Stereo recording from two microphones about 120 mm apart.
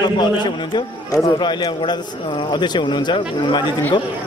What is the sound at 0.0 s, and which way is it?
A man's voice, 40° left (ahead or behind).